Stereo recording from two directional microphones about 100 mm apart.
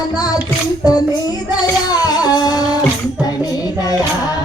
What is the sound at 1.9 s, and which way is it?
Music, 45° left (ahead or behind).